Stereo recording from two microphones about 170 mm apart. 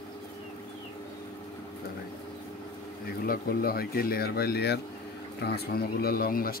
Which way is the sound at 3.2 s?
60° left (ahead or behind).